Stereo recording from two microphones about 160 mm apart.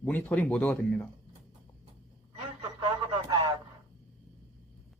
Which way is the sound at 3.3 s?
30° right (ahead or behind).